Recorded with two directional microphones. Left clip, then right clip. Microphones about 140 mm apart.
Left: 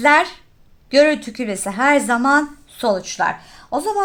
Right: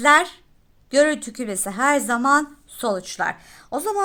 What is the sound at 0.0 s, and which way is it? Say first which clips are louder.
A woman's voice: left 2 dB; 35° right (ahead or behind).